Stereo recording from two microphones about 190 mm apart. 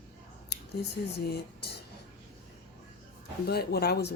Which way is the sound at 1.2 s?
55° left (ahead or behind).